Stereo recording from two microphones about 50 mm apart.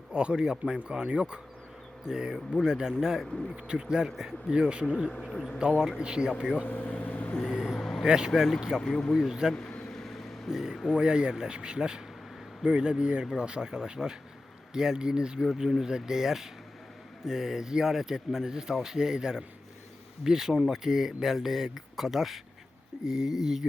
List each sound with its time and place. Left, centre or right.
0.1 s speech: centre
3.2 s speech: centre
3.5 s speech: centre
4.9 s speech: centre
5.6 s speech: centre
6.7 s vehicle: left
7.3 s vehicle: centre
7.8 s vehicle: centre
8.0 s speech: centre
8.8 s speech: centre
9.1 s speech: centre
9.6 s vehicle: left
9.9 s vehicle: centre
10.5 s speech: centre